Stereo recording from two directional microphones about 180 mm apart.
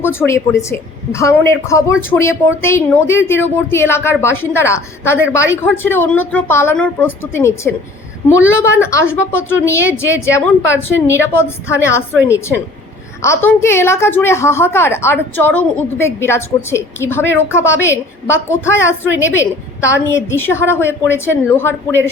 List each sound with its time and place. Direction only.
0.0 s a woman's voice: 15° left (ahead or behind)